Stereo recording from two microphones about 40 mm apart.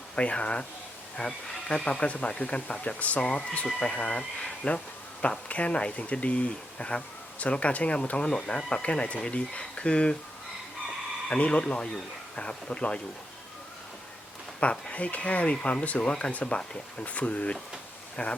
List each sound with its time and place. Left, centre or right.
0.2 s speech: left
3.2 s speech: left
11.3 s speech: left
14.6 s speech: left